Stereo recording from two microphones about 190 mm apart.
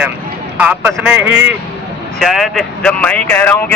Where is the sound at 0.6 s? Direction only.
5° right (ahead or behind).